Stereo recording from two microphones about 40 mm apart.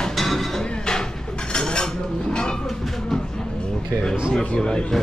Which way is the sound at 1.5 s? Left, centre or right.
Centre.